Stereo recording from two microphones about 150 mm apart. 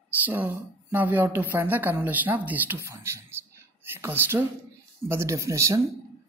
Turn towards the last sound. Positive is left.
turn(degrees=-20)  # may be behind; listen again after turning